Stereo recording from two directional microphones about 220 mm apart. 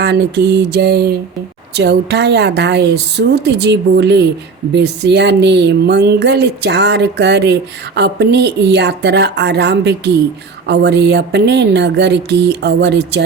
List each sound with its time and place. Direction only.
0.0 s speech: 50° right (ahead or behind)